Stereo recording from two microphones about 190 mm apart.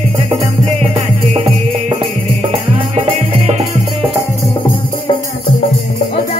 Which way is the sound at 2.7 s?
30° right (ahead or behind).